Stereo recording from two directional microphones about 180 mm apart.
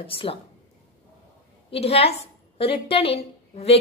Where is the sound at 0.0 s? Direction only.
30° left (ahead or behind).